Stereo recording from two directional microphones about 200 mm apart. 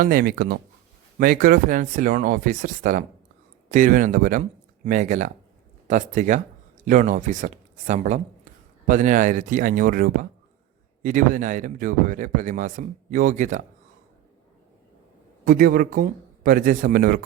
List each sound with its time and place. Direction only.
0.0 s speech: 45° right (ahead or behind)
15.4 s speech: 45° right (ahead or behind)